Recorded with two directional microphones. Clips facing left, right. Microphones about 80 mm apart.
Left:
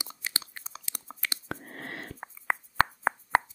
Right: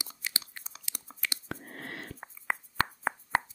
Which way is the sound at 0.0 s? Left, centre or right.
Left.